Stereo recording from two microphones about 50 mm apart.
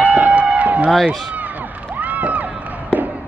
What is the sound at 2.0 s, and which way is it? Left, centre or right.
Crowd, right.